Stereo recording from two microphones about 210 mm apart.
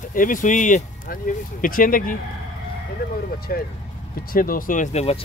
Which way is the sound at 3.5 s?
45° left (ahead or behind).